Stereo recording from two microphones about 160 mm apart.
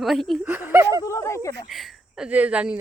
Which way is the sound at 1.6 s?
Centre (ahead or behind).